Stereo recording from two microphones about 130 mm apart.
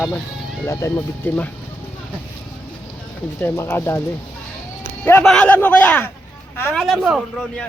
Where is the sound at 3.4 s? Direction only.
15° left (ahead or behind).